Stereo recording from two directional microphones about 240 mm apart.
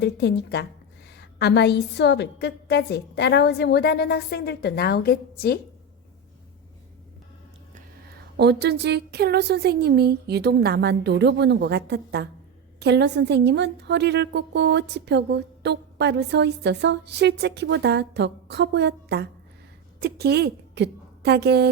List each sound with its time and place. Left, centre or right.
0.0 s a woman's voice: left
8.4 s a woman's voice: right